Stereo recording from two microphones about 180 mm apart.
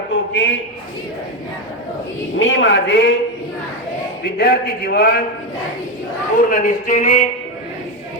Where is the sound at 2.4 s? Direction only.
90° left.